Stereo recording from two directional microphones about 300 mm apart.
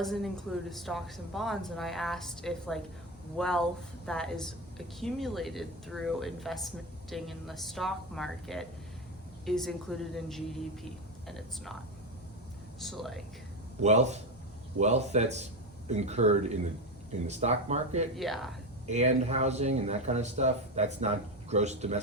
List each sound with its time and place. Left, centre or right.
0.0 s speech: centre
12.8 s speech: centre
13.8 s speech: right
18.2 s speech: centre
18.9 s speech: right